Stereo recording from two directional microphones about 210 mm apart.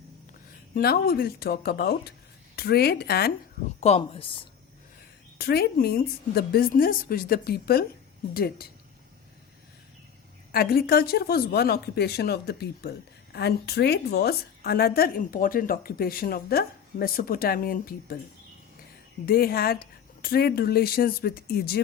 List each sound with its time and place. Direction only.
0.7 s a woman's voice: 45° left (ahead or behind)
3.8 s speech: 30° left (ahead or behind)
5.4 s a woman's voice: 50° left (ahead or behind)
10.5 s a woman's voice: 45° left (ahead or behind)
19.2 s a woman's voice: 45° left (ahead or behind)